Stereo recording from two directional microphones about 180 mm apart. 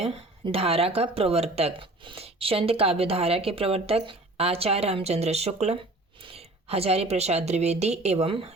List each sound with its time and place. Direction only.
0.0 s speech: 30° right (ahead or behind)